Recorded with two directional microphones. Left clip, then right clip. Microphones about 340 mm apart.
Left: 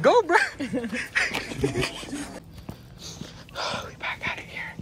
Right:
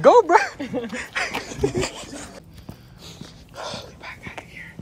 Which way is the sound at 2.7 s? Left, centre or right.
Centre.